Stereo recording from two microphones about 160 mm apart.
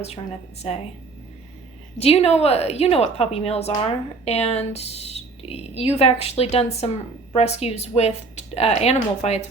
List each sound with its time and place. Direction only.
2.0 s a woman's voice: 40° left (ahead or behind)